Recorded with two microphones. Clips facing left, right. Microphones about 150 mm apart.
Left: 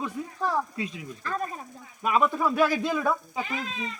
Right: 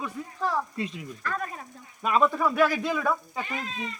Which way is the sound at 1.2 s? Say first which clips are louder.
Left 1 dB; 30° left (ahead or behind).